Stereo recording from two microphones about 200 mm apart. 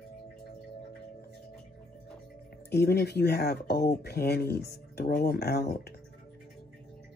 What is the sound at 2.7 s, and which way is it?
Speech, 55° left (ahead or behind).